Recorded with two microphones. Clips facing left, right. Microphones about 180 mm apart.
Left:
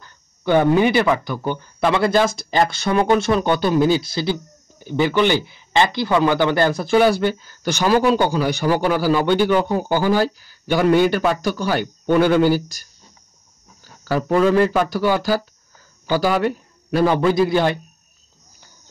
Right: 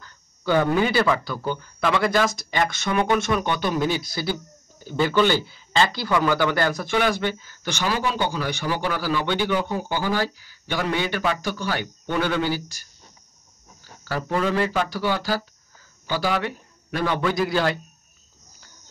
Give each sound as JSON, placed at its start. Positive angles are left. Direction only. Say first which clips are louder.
{"t": 0.0, "sound": "a man's voice", "louder": "left 4 dB", "side_deg": 20}
{"t": 14.1, "sound": "a man's voice", "louder": "left 8 dB", "side_deg": 50}
{"t": 17.0, "sound": "speech", "louder": "left 7 dB", "side_deg": 30}